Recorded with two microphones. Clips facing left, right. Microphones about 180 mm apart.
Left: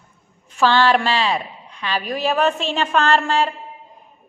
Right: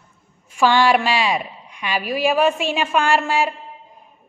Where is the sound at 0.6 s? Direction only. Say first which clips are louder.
Even; 10° right (ahead or behind).